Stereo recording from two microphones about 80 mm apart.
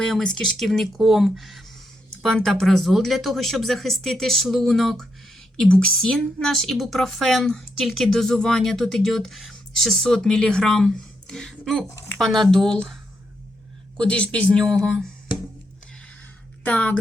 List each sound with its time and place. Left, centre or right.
0.0 s a woman's voice: centre
14.8 s a woman's voice: centre
16.6 s a woman's voice: centre